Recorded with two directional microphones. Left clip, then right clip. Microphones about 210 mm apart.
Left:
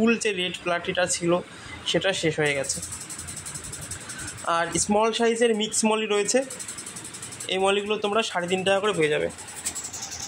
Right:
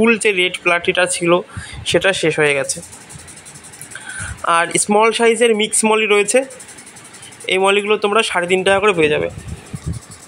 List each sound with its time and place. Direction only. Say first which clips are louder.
0.0 s speech: right 10 dB; 15° right (ahead or behind)
4.5 s speech: right 9 dB; 20° right (ahead or behind)
7.4 s speech: right 9 dB; 20° right (ahead or behind)